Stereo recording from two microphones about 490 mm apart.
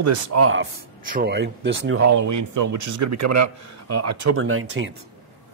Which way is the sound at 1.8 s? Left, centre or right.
Right.